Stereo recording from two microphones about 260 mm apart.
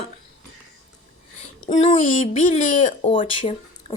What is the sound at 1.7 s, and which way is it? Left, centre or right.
Speech, left.